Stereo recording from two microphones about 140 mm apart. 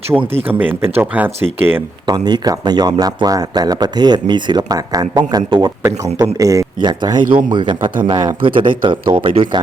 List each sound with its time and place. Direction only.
0.1 s speech: 10° right (ahead or behind)
2.0 s speech: 30° right (ahead or behind)